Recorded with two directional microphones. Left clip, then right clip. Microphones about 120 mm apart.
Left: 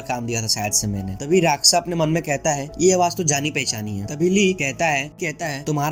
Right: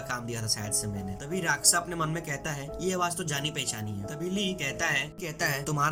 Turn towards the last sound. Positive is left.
turn(degrees=35)  # may be behind; listen again after turning